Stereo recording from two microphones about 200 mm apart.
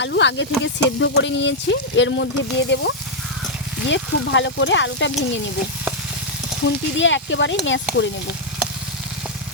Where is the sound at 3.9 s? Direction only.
65° left (ahead or behind).